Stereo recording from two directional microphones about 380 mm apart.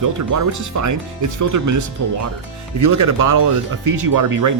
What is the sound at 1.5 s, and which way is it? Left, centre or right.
Speech, right.